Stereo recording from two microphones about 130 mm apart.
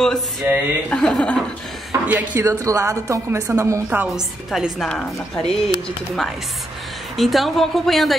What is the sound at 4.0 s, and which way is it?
A woman's voice, 5° right (ahead or behind).